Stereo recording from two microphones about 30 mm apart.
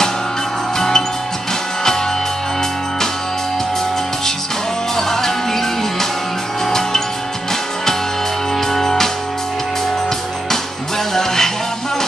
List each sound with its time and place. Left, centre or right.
0.7 s music: centre
4.9 s music: centre
8.5 s music: centre
11.1 s music: centre